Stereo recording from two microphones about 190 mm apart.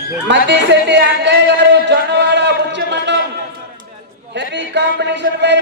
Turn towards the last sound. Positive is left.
turn(degrees=-65)  # may be behind; listen again after turning